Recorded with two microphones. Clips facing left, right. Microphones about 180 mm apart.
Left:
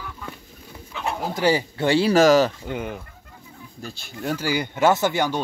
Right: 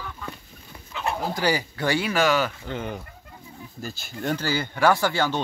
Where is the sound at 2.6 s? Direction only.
5° left (ahead or behind).